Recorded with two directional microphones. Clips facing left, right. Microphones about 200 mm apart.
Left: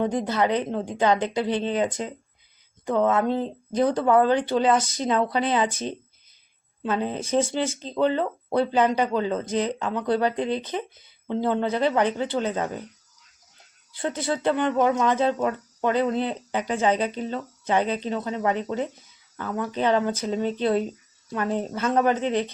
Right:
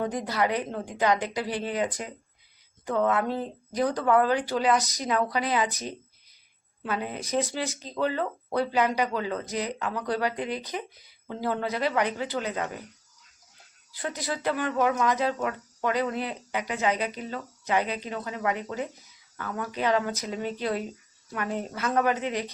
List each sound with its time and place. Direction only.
0.0 s speech: 25° left (ahead or behind)
13.9 s speech: 25° left (ahead or behind)